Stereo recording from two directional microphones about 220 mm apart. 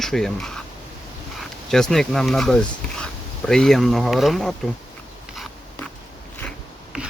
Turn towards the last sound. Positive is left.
turn(degrees=0)  # may be behind; listen again after turning